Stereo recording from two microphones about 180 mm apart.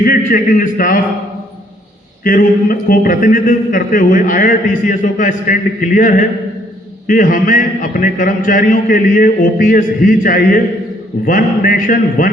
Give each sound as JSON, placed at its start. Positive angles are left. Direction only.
{"t": 0.0, "sound": "a man's voice", "side_deg": 50}
{"t": 2.2, "sound": "a man's voice", "side_deg": 50}